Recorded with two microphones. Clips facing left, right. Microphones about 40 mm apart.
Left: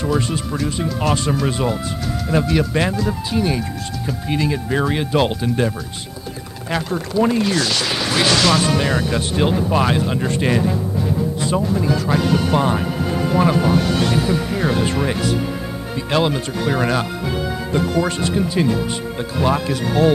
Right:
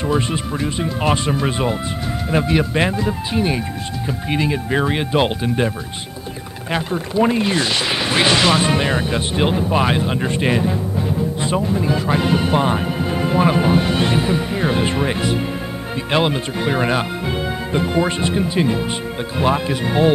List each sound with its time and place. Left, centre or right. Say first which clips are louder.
0.0 s speech: right 1 dB; right
6.7 s speech: even; right